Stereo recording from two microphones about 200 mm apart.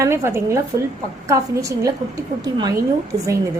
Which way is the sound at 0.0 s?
15° right (ahead or behind).